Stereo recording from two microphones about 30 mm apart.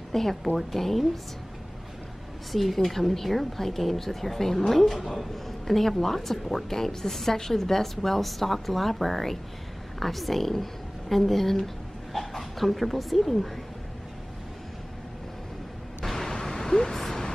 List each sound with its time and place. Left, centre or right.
0.1 s a woman's voice: centre
2.5 s a woman's voice: centre
16.1 s a sound: centre
17.0 s vehicle: centre